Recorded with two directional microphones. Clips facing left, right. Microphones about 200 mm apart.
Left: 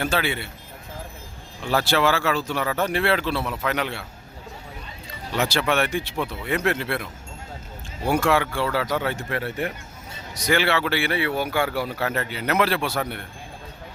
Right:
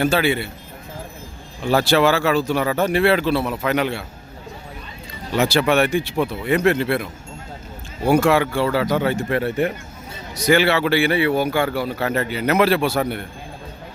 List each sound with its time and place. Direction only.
0.0 s speech: 10° right (ahead or behind)
1.7 s speech: 15° right (ahead or behind)
5.4 s speech: 10° right (ahead or behind)
8.1 s speech: 10° right (ahead or behind)
9.3 s speech: 25° right (ahead or behind)
10.4 s speech: 5° right (ahead or behind)
11.5 s speech: 5° left (ahead or behind)
12.1 s speech: 5° right (ahead or behind)